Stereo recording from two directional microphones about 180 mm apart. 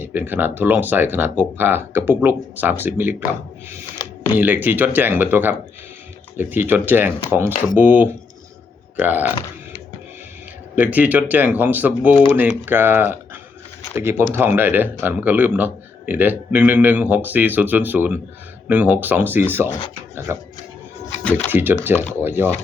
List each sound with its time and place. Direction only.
0.0 s a man's voice: 10° right (ahead or behind)
4.0 s typing: 25° left (ahead or behind)
4.4 s a man's voice: 10° right (ahead or behind)
10.8 s a man's voice: 10° right (ahead or behind)
21.2 s speech: 10° left (ahead or behind)
21.5 s a man's voice: 10° right (ahead or behind)